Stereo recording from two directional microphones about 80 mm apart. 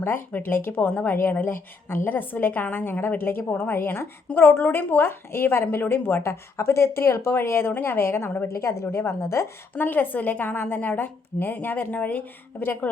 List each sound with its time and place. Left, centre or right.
0.0 s speech: left
9.7 s speech: left